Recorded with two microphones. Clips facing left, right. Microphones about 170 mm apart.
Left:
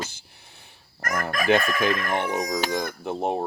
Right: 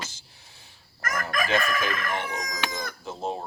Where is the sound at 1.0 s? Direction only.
60° left (ahead or behind).